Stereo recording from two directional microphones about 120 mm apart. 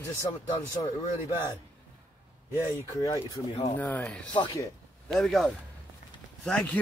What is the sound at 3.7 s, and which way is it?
A man's voice, 15° left (ahead or behind).